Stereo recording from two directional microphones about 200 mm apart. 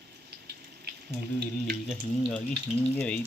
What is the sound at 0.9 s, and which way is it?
Frying, 55° right (ahead or behind).